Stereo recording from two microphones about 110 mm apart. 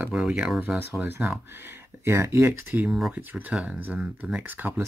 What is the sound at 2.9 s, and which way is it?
Speech, 5° right (ahead or behind).